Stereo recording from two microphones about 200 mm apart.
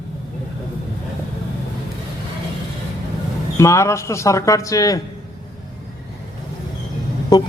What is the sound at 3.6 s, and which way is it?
Speech, 15° left (ahead or behind).